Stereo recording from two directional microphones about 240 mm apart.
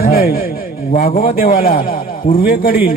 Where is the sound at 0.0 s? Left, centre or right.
Left.